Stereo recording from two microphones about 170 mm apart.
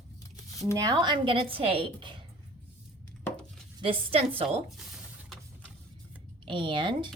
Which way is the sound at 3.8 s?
35° right (ahead or behind).